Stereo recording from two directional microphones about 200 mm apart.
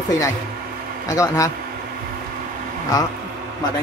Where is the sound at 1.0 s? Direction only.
15° left (ahead or behind).